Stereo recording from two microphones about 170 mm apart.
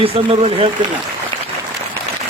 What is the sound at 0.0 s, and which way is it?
Speech, 30° right (ahead or behind).